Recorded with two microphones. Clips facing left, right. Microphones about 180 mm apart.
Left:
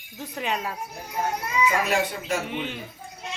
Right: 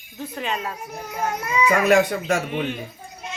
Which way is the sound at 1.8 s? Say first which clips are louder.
Right 8 dB; 70° right (ahead or behind).